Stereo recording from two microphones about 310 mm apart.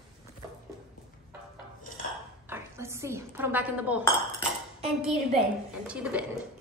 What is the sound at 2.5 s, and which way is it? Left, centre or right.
Speech, centre.